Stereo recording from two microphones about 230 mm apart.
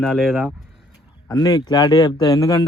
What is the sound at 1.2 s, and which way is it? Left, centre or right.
Speech, centre.